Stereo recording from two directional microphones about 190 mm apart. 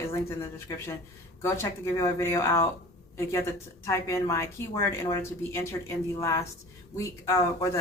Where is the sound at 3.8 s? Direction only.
15° left (ahead or behind).